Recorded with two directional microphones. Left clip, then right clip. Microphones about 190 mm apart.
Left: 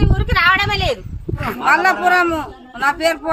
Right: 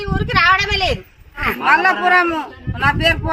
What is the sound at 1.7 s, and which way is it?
A woman's voice, 5° left (ahead or behind).